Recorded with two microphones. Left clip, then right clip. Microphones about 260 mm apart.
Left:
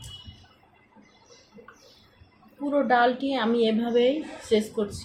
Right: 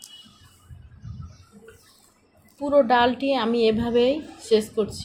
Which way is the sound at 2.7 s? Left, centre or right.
Right.